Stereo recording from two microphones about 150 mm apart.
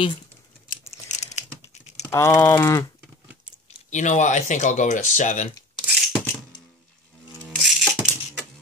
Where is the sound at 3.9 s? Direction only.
55° left (ahead or behind).